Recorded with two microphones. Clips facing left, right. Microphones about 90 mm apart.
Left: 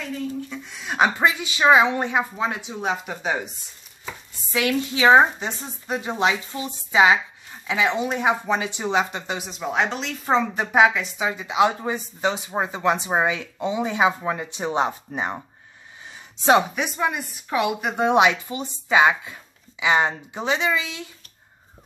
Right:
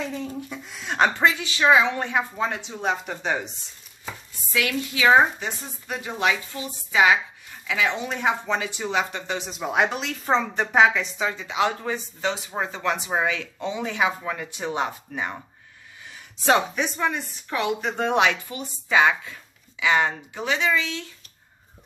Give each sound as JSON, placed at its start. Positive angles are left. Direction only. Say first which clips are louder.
{"t": 0.5, "sound": "speech", "louder": "left 1 dB", "side_deg": 0}
{"t": 4.5, "sound": "speech", "louder": "left 3 dB", "side_deg": 25}
{"t": 9.5, "sound": "a woman's voice", "louder": "right 1 dB", "side_deg": -5}
{"t": 11.2, "sound": "speech", "louder": "left 5 dB", "side_deg": 15}
{"t": 16.4, "sound": "speech", "louder": "left 3 dB", "side_deg": 15}